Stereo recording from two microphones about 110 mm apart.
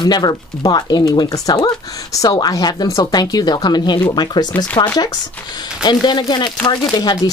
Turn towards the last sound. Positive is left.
turn(degrees=40)  # may be behind; listen again after turning